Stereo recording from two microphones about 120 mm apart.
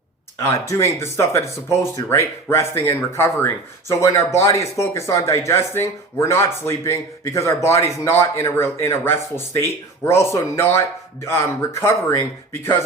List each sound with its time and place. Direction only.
0.3 s speech: 25° left (ahead or behind)